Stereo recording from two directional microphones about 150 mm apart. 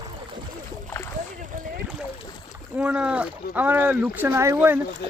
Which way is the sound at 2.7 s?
10° right (ahead or behind).